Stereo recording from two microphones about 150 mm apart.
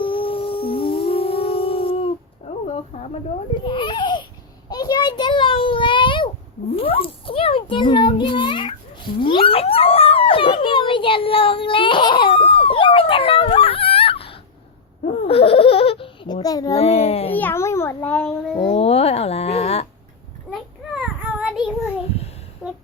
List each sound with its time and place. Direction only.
0.0 s music: 35° left (ahead or behind)
2.9 s a sound: 40° left (ahead or behind)
3.5 s speech: 35° left (ahead or behind)
4.7 s a sound: 25° left (ahead or behind)
6.7 s a child's voice: 40° left (ahead or behind)
9.2 s dog: 35° left (ahead or behind)
15.3 s baby laughter: 40° left (ahead or behind)
16.7 s a child's voice: 40° left (ahead or behind)
17.3 s a child's voice: 15° left (ahead or behind)
18.6 s a sound: 40° left (ahead or behind)
20.5 s child singing: 5° right (ahead or behind)